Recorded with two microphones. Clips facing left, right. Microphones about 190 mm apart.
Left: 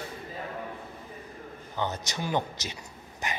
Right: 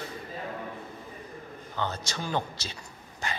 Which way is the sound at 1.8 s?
15° left (ahead or behind).